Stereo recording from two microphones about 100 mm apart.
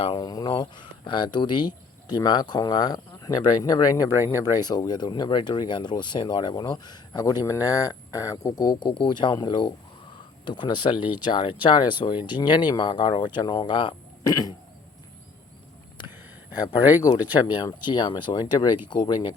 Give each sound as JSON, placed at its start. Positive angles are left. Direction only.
{"t": 0.2, "sound": "speech", "side_deg": 45}
{"t": 14.3, "sound": "cough", "side_deg": 35}
{"t": 17.3, "sound": "speech", "side_deg": 50}